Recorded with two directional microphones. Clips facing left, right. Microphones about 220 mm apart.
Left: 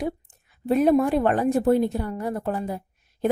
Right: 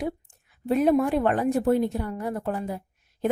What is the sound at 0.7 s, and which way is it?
A woman's voice, 35° left (ahead or behind).